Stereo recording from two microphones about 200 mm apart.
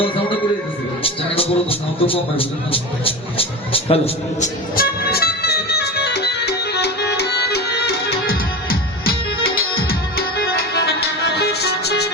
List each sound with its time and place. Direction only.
1.0 s speech: 30° left (ahead or behind)
4.8 s music: 50° left (ahead or behind)